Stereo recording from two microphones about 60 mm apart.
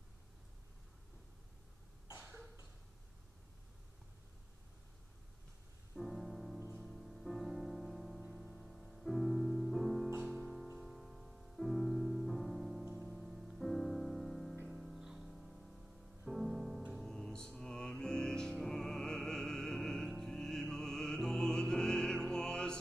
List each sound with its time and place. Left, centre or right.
2.1 s cough: right
5.9 s music: centre